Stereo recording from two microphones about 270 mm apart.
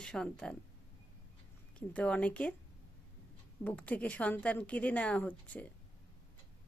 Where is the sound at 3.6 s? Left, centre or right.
Centre.